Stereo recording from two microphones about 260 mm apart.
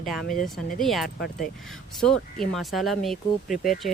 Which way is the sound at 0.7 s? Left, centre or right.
Centre.